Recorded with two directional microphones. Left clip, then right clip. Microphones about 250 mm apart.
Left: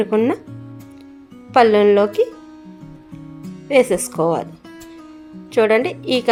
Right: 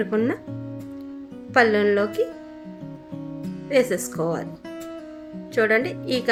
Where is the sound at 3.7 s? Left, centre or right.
Centre.